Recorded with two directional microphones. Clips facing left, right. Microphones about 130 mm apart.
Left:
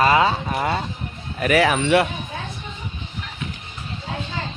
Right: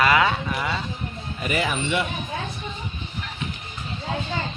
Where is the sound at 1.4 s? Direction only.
75° left (ahead or behind).